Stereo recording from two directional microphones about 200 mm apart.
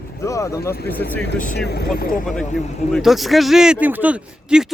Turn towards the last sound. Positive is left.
turn(degrees=-5)  # may be behind; listen again after turning